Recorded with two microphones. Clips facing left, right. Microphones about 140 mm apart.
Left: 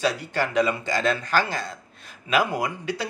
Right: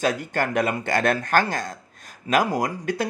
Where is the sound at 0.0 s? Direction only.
50° right (ahead or behind).